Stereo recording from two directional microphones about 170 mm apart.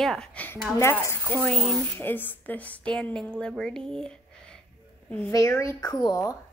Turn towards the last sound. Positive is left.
turn(degrees=25)  # may be behind; listen again after turning